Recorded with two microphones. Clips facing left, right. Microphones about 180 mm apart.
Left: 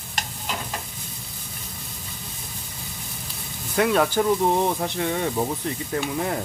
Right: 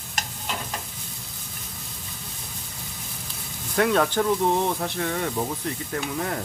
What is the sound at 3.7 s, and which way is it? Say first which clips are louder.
Speech: left 1 dB; 5° left (ahead or behind).